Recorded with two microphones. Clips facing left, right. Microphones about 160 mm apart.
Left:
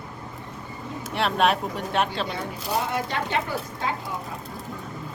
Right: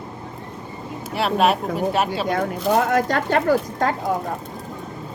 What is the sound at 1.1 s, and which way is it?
Speech, 5° right (ahead or behind).